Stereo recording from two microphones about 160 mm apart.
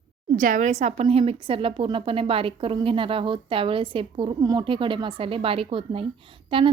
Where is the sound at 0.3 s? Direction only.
55° right (ahead or behind).